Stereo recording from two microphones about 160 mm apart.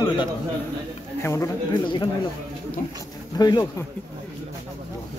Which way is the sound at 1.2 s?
20° left (ahead or behind).